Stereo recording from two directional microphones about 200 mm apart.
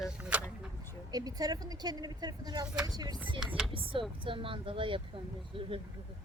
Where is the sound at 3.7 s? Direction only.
25° right (ahead or behind).